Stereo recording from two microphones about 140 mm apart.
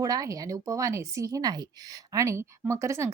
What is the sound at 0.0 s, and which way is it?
A woman's voice, 25° right (ahead or behind).